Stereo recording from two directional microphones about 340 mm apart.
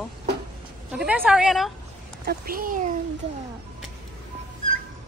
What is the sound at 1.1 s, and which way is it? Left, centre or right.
Speech, centre.